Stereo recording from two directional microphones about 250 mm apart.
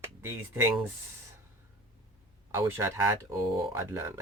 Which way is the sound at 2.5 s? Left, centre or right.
Centre.